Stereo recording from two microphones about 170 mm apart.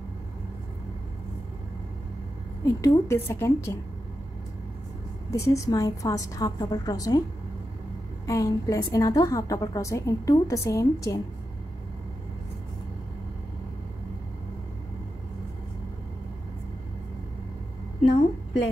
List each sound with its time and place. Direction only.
2.6 s a woman's voice: 20° left (ahead or behind)
5.3 s a woman's voice: 20° left (ahead or behind)
8.3 s a woman's voice: 20° left (ahead or behind)